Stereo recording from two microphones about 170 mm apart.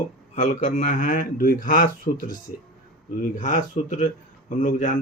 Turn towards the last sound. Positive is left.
turn(degrees=45)  # may be behind; listen again after turning